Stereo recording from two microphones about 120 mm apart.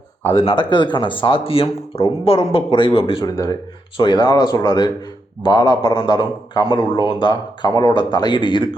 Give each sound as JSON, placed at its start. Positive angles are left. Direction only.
{"t": 0.3, "sound": "speech", "side_deg": 45}
{"t": 3.2, "sound": "a man's voice", "side_deg": 30}